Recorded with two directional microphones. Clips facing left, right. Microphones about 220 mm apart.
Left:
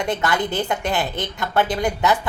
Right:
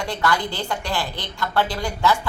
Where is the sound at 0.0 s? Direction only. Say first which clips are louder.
Left 2 dB; 20° left (ahead or behind).